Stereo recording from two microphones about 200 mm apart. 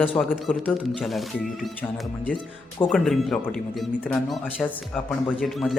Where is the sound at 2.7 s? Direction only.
5° left (ahead or behind).